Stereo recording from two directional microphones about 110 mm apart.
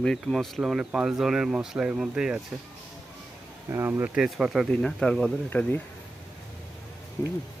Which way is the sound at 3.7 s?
20° right (ahead or behind).